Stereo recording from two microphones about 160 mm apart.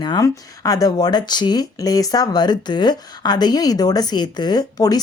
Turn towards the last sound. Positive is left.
turn(degrees=25)  # may be behind; listen again after turning